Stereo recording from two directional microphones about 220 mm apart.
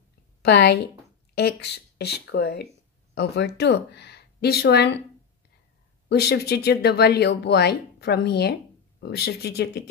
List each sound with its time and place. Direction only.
0.4 s a woman's voice: 50° left (ahead or behind)
6.0 s speech: 45° left (ahead or behind)